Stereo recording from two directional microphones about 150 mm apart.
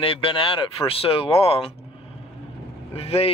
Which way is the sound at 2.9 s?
40° left (ahead or behind).